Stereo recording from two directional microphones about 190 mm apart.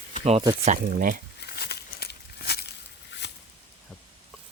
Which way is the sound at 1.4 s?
55° left (ahead or behind).